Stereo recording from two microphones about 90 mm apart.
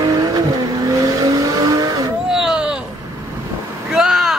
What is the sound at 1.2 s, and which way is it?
Vehicle, 40° right (ahead or behind).